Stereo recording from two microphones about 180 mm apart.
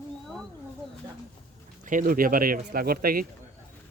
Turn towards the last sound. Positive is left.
turn(degrees=-55)  # may be behind; listen again after turning